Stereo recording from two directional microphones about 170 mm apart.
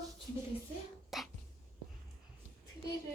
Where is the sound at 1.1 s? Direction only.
Centre (ahead or behind).